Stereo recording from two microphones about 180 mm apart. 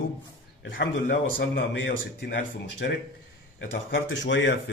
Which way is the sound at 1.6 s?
75° left (ahead or behind).